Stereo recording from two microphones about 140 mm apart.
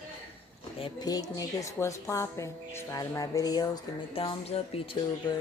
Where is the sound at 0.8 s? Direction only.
30° left (ahead or behind).